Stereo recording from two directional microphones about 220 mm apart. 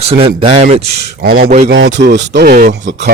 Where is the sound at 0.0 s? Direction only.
25° right (ahead or behind).